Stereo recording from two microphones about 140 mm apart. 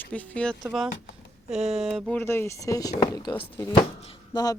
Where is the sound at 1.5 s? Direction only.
50° right (ahead or behind).